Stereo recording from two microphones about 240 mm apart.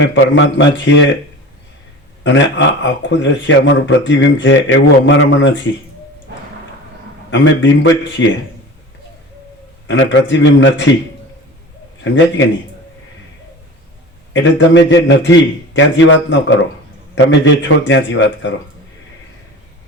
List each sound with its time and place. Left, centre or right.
0.1 s a man's voice: left
2.2 s a man's voice: left
7.3 s a man's voice: left
9.8 s a man's voice: left
12.4 s a man's voice: left
14.3 s a man's voice: left
17.4 s a man's voice: left